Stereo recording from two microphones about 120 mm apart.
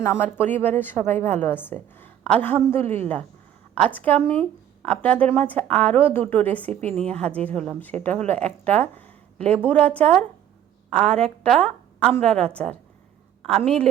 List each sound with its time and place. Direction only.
0.0 s a woman's voice: 20° left (ahead or behind)